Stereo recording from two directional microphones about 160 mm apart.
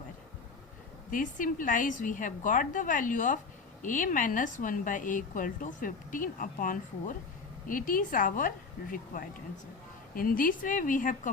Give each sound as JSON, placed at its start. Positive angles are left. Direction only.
{"t": 1.1, "sound": "a woman's voice", "side_deg": 55}